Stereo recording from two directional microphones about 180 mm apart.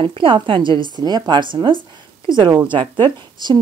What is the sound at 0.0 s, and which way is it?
A woman's voice, 30° right (ahead or behind).